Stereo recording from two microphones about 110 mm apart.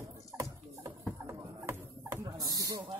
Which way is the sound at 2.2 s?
35° right (ahead or behind).